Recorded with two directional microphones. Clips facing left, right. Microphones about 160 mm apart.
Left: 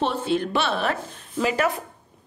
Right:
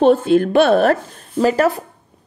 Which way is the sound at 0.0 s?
50° right (ahead or behind).